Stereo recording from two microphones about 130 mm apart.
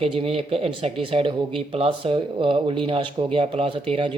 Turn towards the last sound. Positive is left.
turn(degrees=-40)  # may be behind; listen again after turning